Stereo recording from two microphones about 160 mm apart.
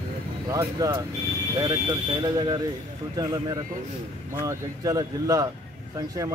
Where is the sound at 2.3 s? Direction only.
25° right (ahead or behind).